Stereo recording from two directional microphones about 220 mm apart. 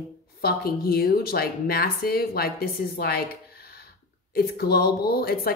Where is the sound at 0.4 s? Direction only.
45° left (ahead or behind).